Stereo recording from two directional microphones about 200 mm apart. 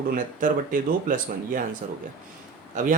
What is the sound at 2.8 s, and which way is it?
Speech, 40° right (ahead or behind).